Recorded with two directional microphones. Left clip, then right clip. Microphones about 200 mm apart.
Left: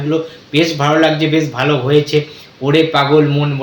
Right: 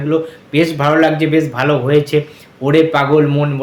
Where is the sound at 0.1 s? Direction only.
15° right (ahead or behind).